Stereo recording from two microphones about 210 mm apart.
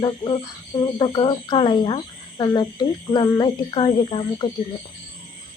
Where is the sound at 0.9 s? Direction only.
20° left (ahead or behind).